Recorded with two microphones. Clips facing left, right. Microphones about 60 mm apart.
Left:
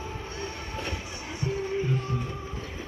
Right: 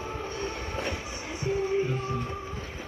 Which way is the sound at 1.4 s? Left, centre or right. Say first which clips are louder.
Right 2 dB; centre.